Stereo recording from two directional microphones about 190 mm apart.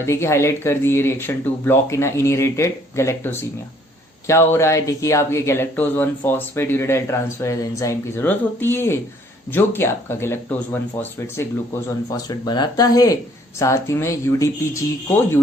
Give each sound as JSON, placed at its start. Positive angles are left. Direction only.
{"t": 0.0, "sound": "speech", "side_deg": 15}
{"t": 12.1, "sound": "speech", "side_deg": 20}